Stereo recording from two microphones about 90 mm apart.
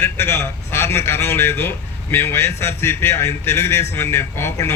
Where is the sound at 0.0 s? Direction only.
25° left (ahead or behind).